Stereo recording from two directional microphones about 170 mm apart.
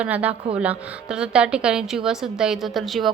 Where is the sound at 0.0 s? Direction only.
10° right (ahead or behind).